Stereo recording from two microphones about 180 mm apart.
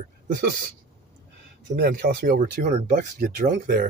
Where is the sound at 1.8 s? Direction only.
60° right (ahead or behind); by 3.5 s 45° right (ahead or behind).